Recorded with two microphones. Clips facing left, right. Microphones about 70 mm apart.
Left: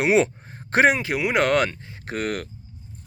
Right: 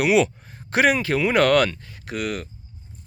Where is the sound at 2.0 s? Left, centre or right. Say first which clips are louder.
Left 1 dB; left.